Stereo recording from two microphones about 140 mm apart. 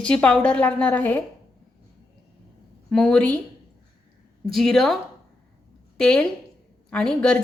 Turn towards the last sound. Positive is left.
turn(degrees=5)  # may be behind; listen again after turning